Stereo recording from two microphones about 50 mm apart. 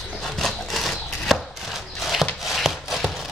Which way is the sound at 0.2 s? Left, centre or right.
Centre.